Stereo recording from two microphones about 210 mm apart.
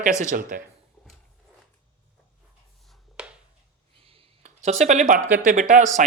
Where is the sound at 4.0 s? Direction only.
25° right (ahead or behind).